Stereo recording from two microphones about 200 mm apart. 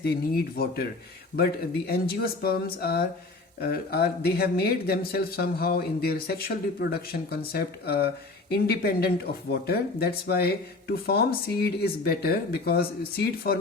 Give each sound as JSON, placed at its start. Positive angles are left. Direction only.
{"t": 0.0, "sound": "speech", "side_deg": 50}